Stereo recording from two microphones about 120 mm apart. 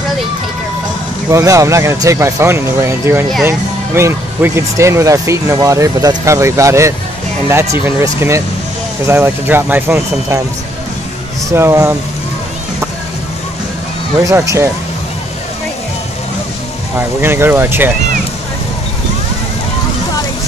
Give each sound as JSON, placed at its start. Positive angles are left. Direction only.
{"t": 1.3, "sound": "speech", "side_deg": -25}
{"t": 11.4, "sound": "speech", "side_deg": -20}
{"t": 14.2, "sound": "speech", "side_deg": -25}
{"t": 17.2, "sound": "speech", "side_deg": -20}